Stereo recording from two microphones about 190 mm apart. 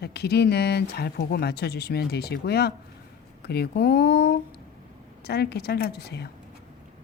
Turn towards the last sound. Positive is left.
turn(degrees=60)  # may be behind; listen again after turning